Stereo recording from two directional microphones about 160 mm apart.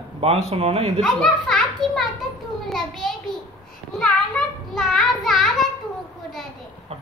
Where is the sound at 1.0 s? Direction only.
Centre (ahead or behind).